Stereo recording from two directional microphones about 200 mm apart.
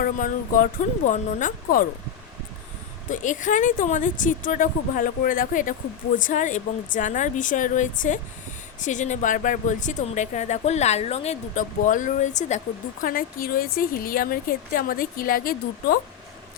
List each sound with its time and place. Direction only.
0.0 s speech: 45° left (ahead or behind)
3.1 s speech: 40° left (ahead or behind)